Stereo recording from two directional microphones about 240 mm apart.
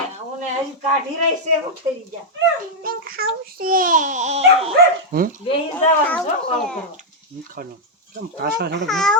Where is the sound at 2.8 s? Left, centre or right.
Right.